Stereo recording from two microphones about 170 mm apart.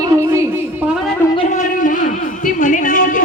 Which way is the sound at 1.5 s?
50° left (ahead or behind).